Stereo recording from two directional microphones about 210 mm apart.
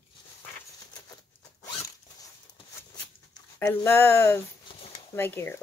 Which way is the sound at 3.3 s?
10° left (ahead or behind).